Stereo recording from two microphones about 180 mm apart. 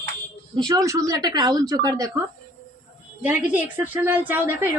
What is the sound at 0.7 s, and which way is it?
Speech, 20° right (ahead or behind).